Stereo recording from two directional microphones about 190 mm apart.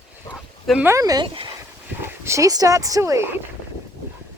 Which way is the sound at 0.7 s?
10° right (ahead or behind).